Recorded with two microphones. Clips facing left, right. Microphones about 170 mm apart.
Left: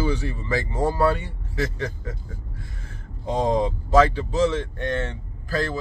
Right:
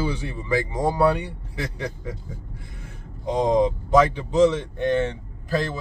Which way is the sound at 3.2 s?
20° right (ahead or behind).